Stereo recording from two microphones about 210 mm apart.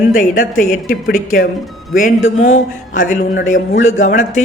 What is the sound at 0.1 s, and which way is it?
A man's voice, 40° left (ahead or behind).